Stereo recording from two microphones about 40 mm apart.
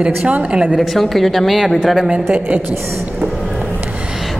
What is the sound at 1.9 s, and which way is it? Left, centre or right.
Speech, right.